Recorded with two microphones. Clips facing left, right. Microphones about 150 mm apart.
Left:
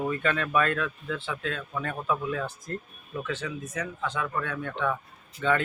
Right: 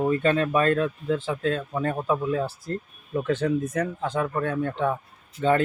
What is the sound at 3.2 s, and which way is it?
Speech, 50° right (ahead or behind).